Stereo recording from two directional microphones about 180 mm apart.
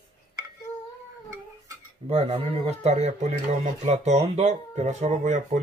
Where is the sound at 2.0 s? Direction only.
35° right (ahead or behind).